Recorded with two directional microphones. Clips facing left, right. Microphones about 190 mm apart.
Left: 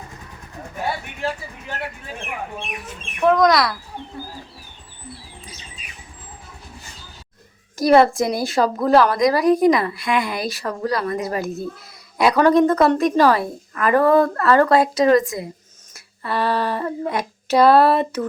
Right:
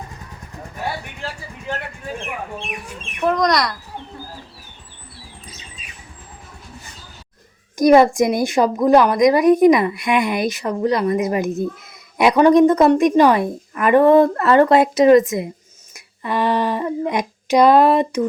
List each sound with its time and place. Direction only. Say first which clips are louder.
3.2 s speech: left 2 dB; centre (ahead or behind)
7.8 s a woman's voice: right 3 dB; 15° right (ahead or behind)
16.2 s a sound: right 2 dB; 15° right (ahead or behind)